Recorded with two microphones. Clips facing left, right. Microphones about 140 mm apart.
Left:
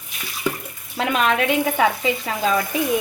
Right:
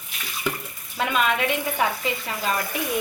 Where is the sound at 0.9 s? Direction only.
90° left.